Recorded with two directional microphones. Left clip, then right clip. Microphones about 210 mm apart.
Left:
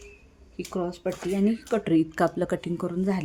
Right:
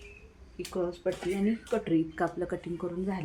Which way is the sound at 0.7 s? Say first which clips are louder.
Left 2 dB; 55° left (ahead or behind).